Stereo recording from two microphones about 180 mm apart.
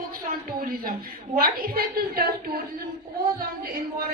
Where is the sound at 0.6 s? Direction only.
50° right (ahead or behind).